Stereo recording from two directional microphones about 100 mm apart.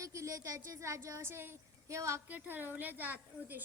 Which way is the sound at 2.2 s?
20° right (ahead or behind).